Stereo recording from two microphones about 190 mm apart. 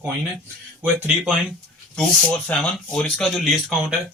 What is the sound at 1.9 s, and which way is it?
Speech, 5° left (ahead or behind).